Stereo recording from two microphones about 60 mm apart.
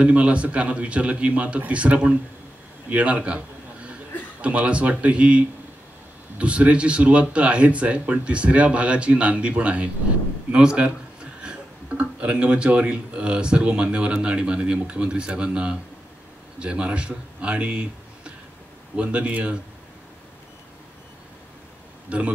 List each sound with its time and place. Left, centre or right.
0.0 s a man's voice: centre
22.1 s speech: right